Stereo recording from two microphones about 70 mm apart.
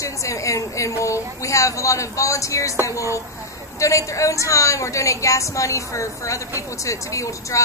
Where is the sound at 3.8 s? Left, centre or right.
Left.